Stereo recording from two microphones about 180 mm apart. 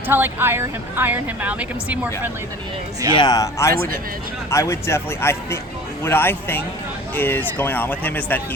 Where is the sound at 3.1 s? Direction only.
25° left (ahead or behind).